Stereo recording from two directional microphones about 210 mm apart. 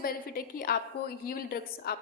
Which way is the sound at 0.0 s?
45° left (ahead or behind).